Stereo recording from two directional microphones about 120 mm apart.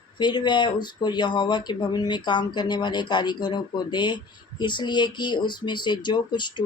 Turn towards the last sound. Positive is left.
turn(degrees=40)  # may be behind; listen again after turning